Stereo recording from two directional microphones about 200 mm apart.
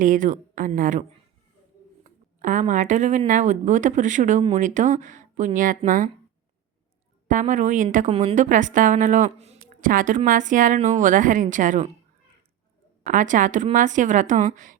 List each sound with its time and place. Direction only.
0.0 s speech: 40° right (ahead or behind)
2.0 s speech: 40° right (ahead or behind)
7.3 s speech: 40° right (ahead or behind)
13.1 s speech: 40° right (ahead or behind)